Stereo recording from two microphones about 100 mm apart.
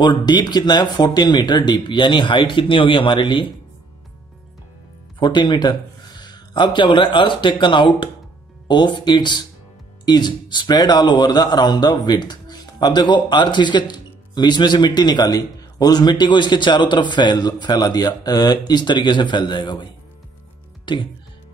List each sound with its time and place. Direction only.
0.0 s speech: 45° left (ahead or behind)
5.2 s speech: 45° left (ahead or behind)